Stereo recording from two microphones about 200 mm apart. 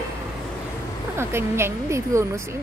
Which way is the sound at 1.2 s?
10° right (ahead or behind).